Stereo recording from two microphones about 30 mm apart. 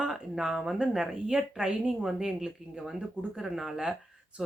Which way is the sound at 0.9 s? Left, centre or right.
Centre.